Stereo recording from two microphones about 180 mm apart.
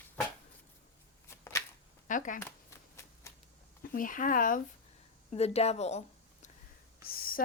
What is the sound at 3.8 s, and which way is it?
Speech, 50° left (ahead or behind).